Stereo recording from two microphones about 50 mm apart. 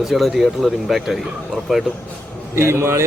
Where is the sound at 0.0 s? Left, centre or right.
Centre.